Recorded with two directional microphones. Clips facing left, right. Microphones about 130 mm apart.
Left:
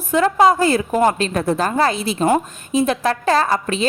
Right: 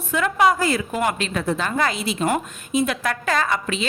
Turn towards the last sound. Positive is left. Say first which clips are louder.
# left 5 dB
turn(degrees=35)  # may be behind; listen again after turning